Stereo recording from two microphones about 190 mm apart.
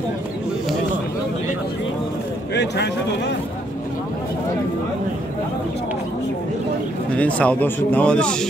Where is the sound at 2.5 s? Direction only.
65° left (ahead or behind).